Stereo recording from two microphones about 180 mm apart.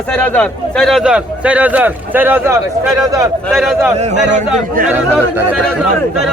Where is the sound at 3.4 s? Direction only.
Centre (ahead or behind).